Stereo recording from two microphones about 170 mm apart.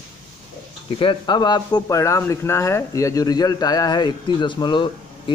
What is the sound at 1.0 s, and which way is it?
Speech, 30° left (ahead or behind).